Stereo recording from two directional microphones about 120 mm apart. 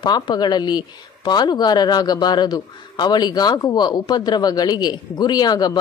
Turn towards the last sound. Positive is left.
turn(degrees=35)  # may be behind; listen again after turning